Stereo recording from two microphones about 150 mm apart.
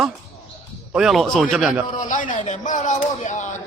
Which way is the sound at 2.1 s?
60° left (ahead or behind).